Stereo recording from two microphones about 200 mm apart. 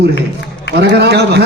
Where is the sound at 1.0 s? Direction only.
55° right (ahead or behind).